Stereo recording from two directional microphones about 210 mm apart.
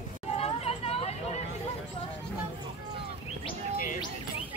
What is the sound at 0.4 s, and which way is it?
Hubbub, 30° left (ahead or behind).